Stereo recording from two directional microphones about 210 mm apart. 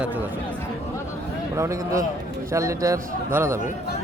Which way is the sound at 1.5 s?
15° right (ahead or behind).